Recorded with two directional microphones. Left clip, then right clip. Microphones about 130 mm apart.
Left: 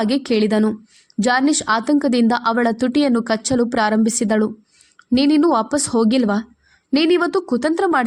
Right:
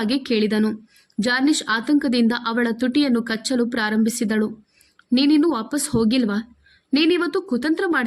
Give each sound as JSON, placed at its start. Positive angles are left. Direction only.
{"t": 0.0, "sound": "a woman's voice", "side_deg": 45}